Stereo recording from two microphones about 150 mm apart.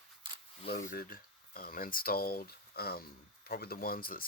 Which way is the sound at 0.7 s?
85° left.